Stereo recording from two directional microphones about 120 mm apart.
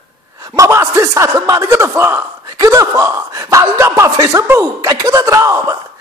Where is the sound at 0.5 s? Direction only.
25° right (ahead or behind).